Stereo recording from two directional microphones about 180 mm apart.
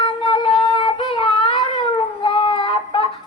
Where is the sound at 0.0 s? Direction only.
30° left (ahead or behind).